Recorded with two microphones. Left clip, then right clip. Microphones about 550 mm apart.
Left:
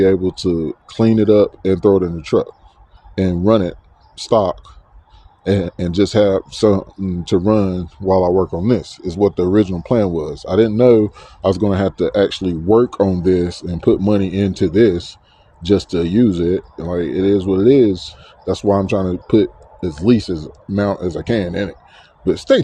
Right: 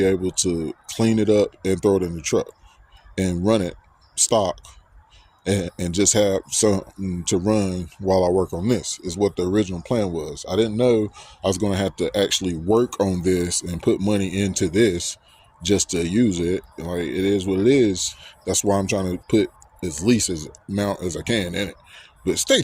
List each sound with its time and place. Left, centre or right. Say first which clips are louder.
0.0 s speech: left 6 dB; right